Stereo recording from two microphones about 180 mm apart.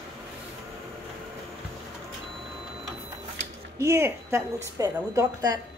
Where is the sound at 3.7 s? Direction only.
15° right (ahead or behind).